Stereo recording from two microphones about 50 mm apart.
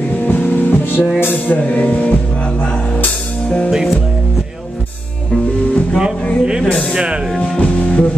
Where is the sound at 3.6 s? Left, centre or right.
Centre.